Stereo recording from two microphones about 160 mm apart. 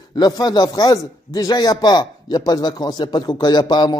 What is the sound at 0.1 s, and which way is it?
A man's voice, 25° left (ahead or behind).